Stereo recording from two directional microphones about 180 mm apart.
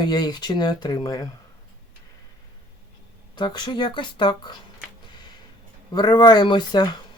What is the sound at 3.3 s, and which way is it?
Speech, 25° left (ahead or behind).